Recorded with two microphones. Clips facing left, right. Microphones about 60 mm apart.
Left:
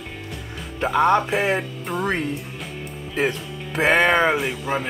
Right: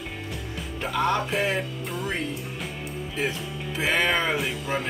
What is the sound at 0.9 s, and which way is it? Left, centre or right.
Music, left.